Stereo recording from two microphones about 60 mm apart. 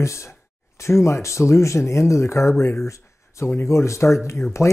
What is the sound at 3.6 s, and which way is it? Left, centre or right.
A man's voice, left.